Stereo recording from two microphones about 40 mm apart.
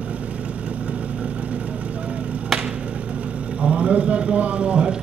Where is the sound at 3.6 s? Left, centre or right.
Right.